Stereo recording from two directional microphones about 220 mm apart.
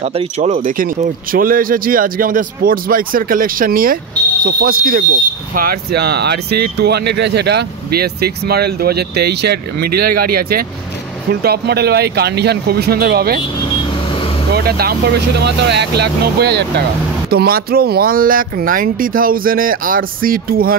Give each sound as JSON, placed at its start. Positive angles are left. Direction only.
{"t": 0.0, "sound": "speech", "side_deg": -30}
{"t": 14.5, "sound": "speech", "side_deg": -45}